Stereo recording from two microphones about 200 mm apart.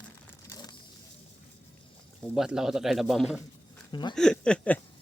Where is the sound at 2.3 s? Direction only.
5° right (ahead or behind).